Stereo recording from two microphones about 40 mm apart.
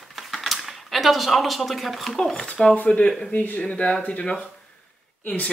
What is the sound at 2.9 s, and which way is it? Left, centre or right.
Speech, left.